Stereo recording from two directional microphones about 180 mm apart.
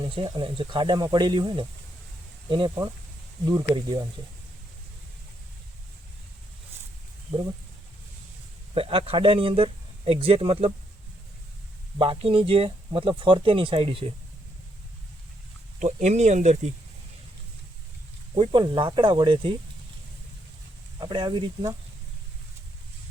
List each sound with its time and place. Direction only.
0.1 s speech: 30° right (ahead or behind)
8.7 s speech: 30° right (ahead or behind)
11.9 s speech: 30° right (ahead or behind)
15.8 s speech: 40° right (ahead or behind)
18.3 s speech: 25° right (ahead or behind)
21.0 s speech: 25° right (ahead or behind)